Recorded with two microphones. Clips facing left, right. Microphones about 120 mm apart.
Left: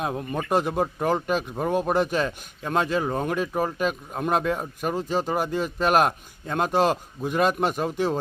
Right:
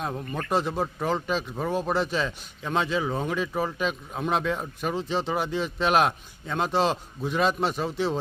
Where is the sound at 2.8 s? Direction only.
50° left (ahead or behind).